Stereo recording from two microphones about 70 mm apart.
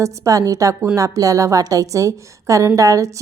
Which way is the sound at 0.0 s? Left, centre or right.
Right.